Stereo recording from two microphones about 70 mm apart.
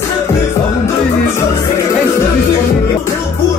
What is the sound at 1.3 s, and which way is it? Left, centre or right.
Music, left.